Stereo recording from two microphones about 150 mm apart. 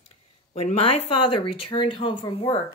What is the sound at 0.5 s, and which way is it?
Speech, 40° left (ahead or behind).